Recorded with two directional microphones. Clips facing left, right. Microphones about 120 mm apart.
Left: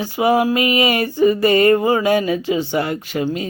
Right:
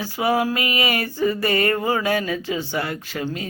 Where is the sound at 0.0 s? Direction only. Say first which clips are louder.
Left 5 dB; 20° left (ahead or behind).